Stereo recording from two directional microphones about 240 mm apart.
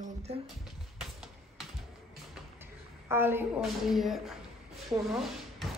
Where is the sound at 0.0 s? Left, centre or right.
Right.